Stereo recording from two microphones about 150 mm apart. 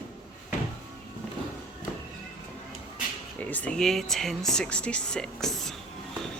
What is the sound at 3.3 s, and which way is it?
Speech, 10° left (ahead or behind).